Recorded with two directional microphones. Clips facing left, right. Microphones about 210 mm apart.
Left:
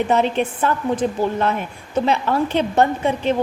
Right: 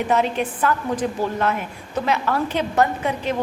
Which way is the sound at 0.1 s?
25° left (ahead or behind).